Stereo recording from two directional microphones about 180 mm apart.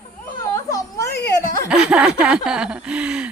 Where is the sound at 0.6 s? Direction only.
15° left (ahead or behind).